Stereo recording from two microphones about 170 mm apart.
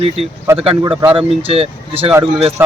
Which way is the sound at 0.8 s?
20° right (ahead or behind).